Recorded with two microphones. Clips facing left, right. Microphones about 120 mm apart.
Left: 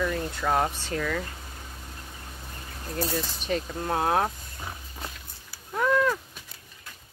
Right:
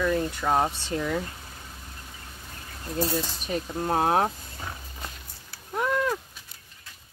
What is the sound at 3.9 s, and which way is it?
Speech, 30° right (ahead or behind).